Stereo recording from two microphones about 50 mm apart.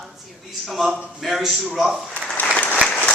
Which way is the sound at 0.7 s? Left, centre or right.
Centre.